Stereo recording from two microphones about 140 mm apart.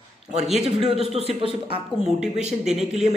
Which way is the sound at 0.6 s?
45° right (ahead or behind).